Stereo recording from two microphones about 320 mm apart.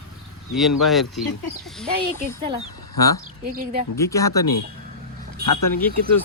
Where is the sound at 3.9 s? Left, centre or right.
Centre.